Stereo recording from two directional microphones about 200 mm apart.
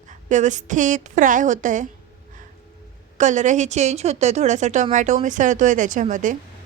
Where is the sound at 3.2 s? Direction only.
35° right (ahead or behind).